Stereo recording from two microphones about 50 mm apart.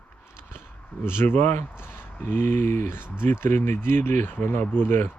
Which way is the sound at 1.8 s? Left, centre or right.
Left.